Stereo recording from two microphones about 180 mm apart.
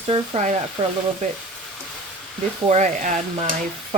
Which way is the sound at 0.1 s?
40° right (ahead or behind).